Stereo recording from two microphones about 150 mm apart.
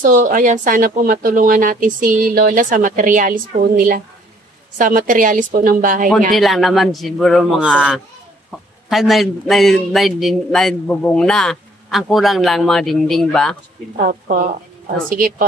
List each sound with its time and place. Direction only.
0.0 s speech: 60° right (ahead or behind)
6.3 s a man's voice: centre (ahead or behind)
13.9 s a woman's voice: 60° right (ahead or behind)